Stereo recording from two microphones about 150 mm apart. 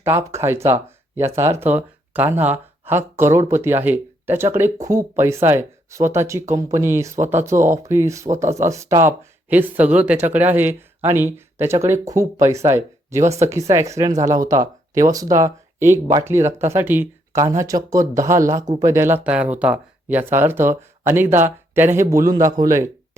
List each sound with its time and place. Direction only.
0.0 s speech: 20° right (ahead or behind)
8.3 s speech: 55° right (ahead or behind)
8.5 s speech: 20° right (ahead or behind)